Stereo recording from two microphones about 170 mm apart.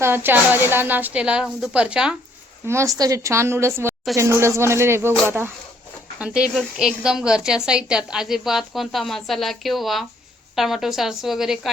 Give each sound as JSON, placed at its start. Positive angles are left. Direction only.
{"t": 0.0, "sound": "a woman's voice", "side_deg": -10}
{"t": 2.6, "sound": "a woman's voice", "side_deg": -15}